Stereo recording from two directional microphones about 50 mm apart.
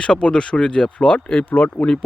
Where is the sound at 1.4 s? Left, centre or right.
Left.